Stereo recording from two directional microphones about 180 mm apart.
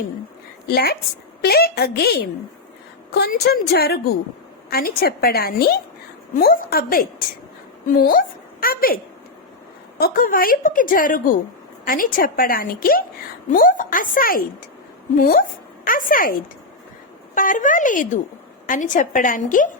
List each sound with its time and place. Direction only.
0.7 s a woman's voice: 60° left (ahead or behind)
10.0 s a woman's voice: 50° left (ahead or behind)
17.3 s a woman's voice: 50° left (ahead or behind)